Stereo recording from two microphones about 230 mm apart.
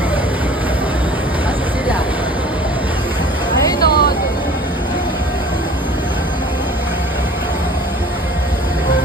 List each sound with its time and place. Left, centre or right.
3.8 s vehicle: left